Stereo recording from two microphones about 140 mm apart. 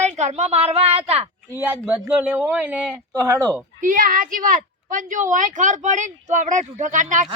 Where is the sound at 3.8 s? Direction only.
70° right (ahead or behind).